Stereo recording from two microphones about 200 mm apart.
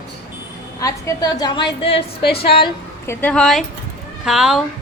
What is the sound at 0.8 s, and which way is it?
A woman's voice, 15° left (ahead or behind).